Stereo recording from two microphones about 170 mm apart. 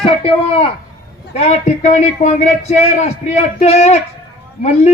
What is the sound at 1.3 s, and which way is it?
Speech, 40° left (ahead or behind).